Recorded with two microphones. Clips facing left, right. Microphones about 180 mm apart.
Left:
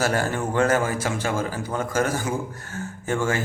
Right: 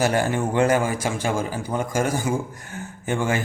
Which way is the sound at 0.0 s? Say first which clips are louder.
Right 2 dB; 15° right (ahead or behind).